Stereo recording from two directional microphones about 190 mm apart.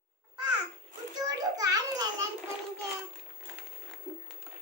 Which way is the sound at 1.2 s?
20° right (ahead or behind).